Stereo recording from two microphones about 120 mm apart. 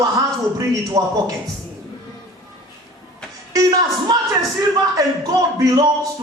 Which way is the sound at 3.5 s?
30° right (ahead or behind).